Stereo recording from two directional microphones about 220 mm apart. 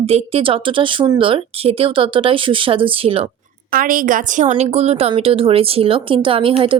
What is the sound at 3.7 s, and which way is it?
A woman's voice, 40° right (ahead or behind).